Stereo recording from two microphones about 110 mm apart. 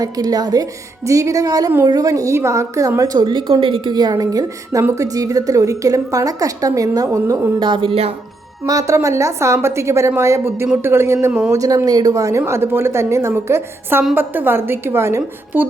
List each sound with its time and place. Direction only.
0.0 s a woman's voice: 35° right (ahead or behind)
3.2 s a woman's voice: 50° right (ahead or behind); by 7.3 s 35° right (ahead or behind)
7.6 s speech: 50° right (ahead or behind)
8.6 s a woman's voice: 30° right (ahead or behind); by 11.5 s 15° right (ahead or behind)
11.5 s a woman's voice: 30° right (ahead or behind)